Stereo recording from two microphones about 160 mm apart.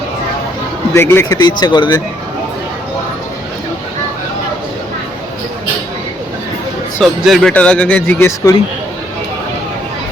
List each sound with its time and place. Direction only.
0.9 s speech: 15° left (ahead or behind)
7.0 s speech: centre (ahead or behind)